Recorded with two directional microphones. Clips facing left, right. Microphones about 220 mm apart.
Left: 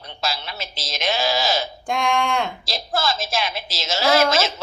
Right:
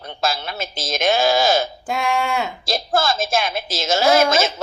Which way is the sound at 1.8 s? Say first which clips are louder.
Even; 5° right (ahead or behind).